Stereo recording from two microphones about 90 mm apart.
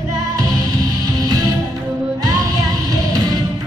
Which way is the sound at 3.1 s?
45° right (ahead or behind).